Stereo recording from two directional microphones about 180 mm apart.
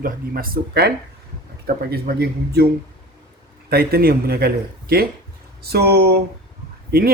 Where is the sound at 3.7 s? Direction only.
60° right (ahead or behind).